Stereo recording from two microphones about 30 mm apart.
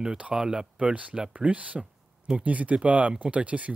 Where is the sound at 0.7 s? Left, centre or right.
Right.